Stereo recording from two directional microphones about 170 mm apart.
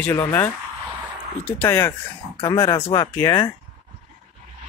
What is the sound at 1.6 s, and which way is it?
Speech, 15° left (ahead or behind).